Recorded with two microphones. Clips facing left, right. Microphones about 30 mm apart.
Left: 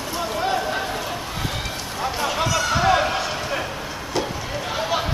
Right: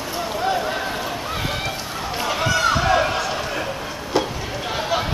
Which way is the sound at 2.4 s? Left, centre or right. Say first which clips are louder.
Right 3 dB; right.